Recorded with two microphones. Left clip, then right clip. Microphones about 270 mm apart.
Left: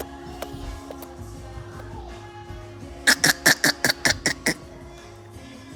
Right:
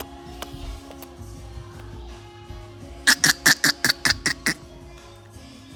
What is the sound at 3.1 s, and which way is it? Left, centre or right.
Duck, centre.